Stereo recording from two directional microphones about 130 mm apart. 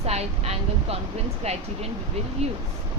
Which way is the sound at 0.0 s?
55° right (ahead or behind).